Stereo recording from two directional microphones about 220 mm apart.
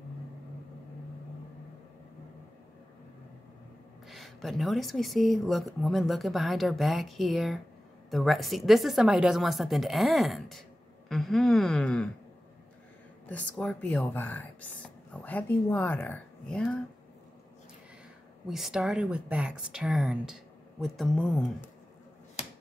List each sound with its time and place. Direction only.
4.1 s speech: centre (ahead or behind)
13.3 s speech: 5° left (ahead or behind)
18.5 s speech: centre (ahead or behind)